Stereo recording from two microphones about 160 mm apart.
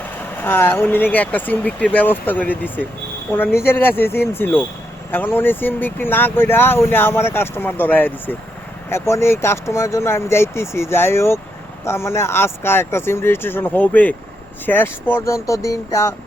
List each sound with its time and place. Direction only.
0.3 s speech: 10° left (ahead or behind)